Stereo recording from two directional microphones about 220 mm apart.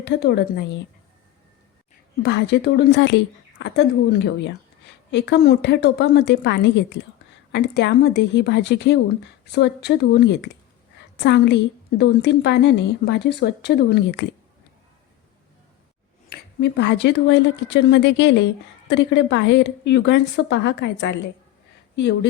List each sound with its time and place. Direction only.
0.0 s a woman's voice: 50° left (ahead or behind)
2.2 s a woman's voice: 50° left (ahead or behind)
16.3 s a woman's voice: 50° left (ahead or behind)